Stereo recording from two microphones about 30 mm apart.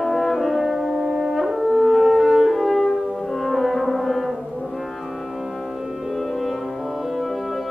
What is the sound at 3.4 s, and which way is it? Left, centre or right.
Music, centre.